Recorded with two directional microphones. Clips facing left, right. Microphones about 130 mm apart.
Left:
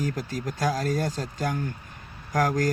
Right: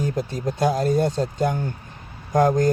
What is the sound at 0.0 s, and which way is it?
Speech, 25° right (ahead or behind).